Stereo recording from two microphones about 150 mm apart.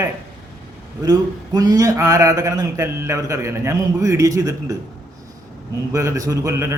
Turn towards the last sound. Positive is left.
turn(degrees=-20)  # may be behind; listen again after turning